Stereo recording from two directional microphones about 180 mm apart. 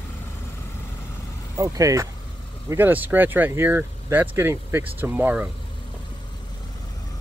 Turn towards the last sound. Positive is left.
turn(degrees=-5)  # may be behind; listen again after turning